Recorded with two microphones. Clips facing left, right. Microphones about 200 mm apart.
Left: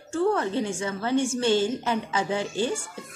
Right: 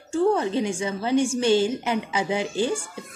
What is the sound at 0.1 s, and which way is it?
Speech, 15° right (ahead or behind).